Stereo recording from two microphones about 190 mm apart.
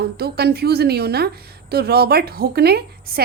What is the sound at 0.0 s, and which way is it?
A woman's voice, 55° right (ahead or behind).